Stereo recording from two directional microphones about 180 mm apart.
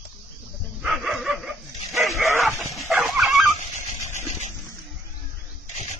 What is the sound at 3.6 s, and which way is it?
Stir, 40° left (ahead or behind).